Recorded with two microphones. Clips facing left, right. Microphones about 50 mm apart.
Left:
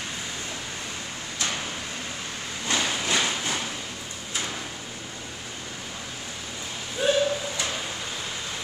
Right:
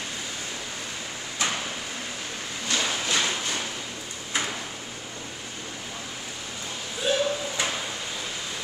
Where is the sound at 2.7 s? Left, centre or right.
Centre.